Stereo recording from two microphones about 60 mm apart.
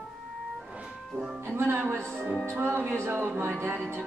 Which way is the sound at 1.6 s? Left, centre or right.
Right.